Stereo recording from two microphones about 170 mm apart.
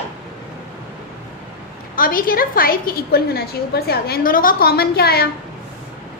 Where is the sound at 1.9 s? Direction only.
55° left (ahead or behind).